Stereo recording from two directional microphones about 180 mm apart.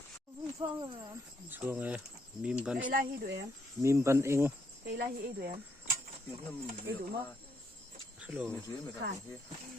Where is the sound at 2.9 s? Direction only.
60° right (ahead or behind).